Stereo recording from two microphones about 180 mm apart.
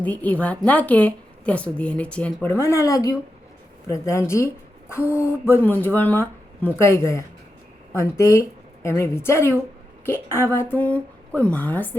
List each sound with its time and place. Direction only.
0.0 s a woman's voice: 10° left (ahead or behind)